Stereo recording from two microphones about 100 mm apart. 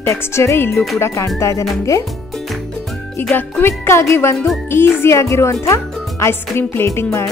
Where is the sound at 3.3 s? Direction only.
25° left (ahead or behind).